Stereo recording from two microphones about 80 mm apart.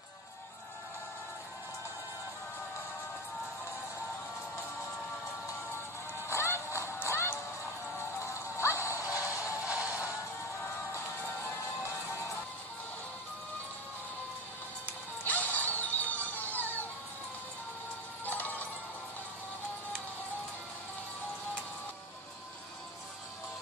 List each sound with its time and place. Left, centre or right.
6.1 s music: left
9.6 s music: centre
15.2 s music: left
18.2 s music: left